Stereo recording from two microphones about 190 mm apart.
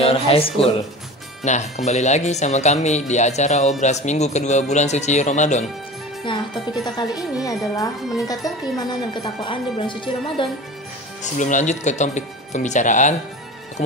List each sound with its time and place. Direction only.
0.0 s speech: 30° left (ahead or behind)
6.2 s speech: 25° left (ahead or behind)
11.3 s speech: 40° left (ahead or behind)